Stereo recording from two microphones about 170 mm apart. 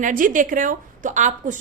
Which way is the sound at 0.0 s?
55° right (ahead or behind).